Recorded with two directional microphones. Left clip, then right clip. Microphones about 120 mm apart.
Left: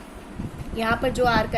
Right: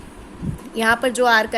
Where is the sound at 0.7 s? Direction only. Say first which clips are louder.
Right 5 dB; 60° right (ahead or behind).